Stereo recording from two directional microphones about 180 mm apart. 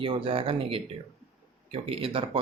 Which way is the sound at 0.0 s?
30° right (ahead or behind).